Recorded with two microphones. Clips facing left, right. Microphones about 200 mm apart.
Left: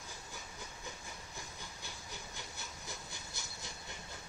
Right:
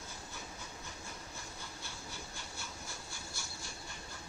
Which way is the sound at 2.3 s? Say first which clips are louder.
Right 1 dB; 20° left (ahead or behind).